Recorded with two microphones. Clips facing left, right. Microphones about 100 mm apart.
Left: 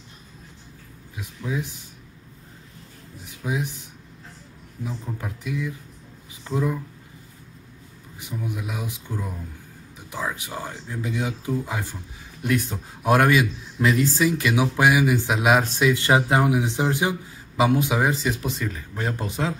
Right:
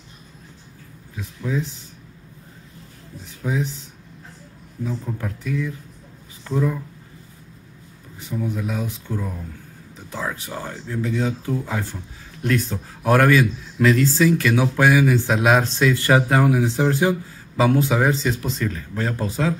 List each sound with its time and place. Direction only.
1.1 s speech: 15° left (ahead or behind)
3.3 s speech: 15° left (ahead or behind)
5.2 s speech: 10° left (ahead or behind)
8.5 s speech: 10° left (ahead or behind)